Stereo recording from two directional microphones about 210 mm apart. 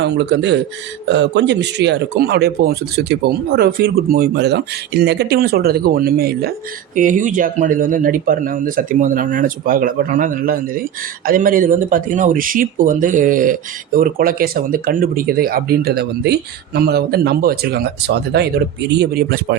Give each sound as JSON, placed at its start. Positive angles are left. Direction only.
{"t": 0.0, "sound": "speech", "side_deg": -55}